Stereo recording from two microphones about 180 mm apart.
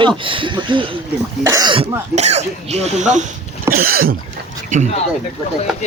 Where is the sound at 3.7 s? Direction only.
55° right (ahead or behind).